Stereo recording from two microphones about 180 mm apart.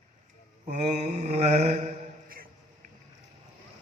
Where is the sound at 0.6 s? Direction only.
40° right (ahead or behind).